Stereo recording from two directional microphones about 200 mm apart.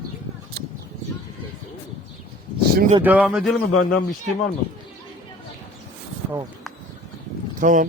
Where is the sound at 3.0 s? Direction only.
5° right (ahead or behind).